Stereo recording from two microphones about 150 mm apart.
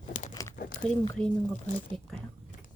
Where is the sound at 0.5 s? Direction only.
70° left (ahead or behind).